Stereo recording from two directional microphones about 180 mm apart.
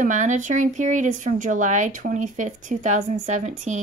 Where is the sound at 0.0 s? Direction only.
45° right (ahead or behind).